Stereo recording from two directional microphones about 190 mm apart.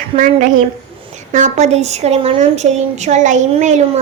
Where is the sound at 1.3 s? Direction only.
40° right (ahead or behind).